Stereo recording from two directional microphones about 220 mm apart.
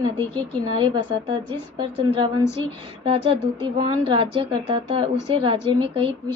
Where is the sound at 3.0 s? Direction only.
25° right (ahead or behind).